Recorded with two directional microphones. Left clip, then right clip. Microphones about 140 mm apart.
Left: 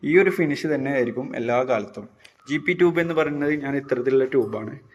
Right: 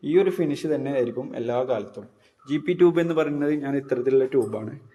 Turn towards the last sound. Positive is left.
turn(degrees=-10)  # may be behind; listen again after turning